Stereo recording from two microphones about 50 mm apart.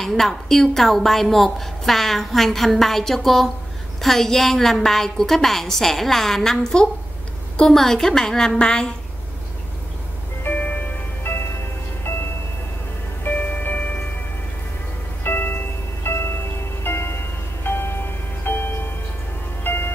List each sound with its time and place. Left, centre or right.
0.0 s a woman's voice: centre
10.4 s music: left
11.3 s music: left
13.2 s music: left
15.2 s music: left
16.1 s music: left